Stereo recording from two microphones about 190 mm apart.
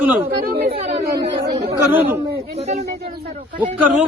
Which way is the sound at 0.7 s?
30° right (ahead or behind).